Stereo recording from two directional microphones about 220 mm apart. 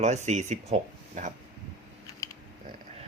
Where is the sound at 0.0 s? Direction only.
30° right (ahead or behind).